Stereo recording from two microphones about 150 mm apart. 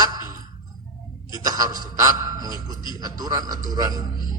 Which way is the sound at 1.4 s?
25° right (ahead or behind).